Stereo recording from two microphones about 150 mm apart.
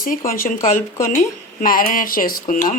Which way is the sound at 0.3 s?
65° left (ahead or behind).